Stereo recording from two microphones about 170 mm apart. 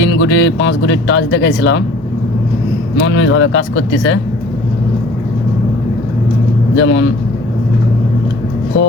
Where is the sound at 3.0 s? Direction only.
90° left.